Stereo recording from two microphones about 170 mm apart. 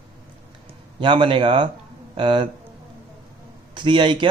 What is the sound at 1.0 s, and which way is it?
Speech, 30° right (ahead or behind).